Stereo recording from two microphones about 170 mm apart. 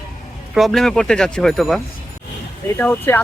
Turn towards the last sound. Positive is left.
turn(degrees=10)  # may be behind; listen again after turning